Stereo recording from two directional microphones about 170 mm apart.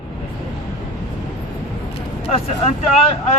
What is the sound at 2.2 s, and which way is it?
Speech, 35° left (ahead or behind).